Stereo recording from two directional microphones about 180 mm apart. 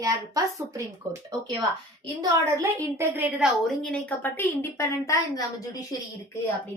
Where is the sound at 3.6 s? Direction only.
5° left (ahead or behind); by 6.1 s 20° left (ahead or behind).